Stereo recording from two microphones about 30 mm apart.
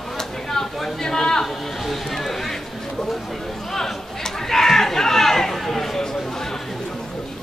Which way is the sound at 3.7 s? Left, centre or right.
Centre.